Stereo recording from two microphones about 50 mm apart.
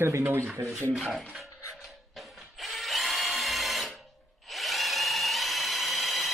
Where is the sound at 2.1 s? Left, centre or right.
Centre.